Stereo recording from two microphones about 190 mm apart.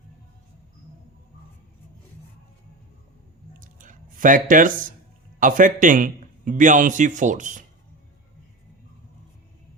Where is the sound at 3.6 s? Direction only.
45° right (ahead or behind).